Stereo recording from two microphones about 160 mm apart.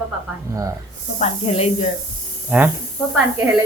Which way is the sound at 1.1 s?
40° left (ahead or behind).